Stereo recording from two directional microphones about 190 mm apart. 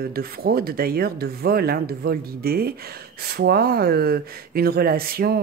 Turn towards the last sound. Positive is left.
turn(degrees=-55)  # may be behind; listen again after turning